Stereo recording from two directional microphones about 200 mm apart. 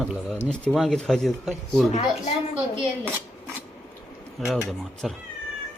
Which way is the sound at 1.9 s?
35° left (ahead or behind).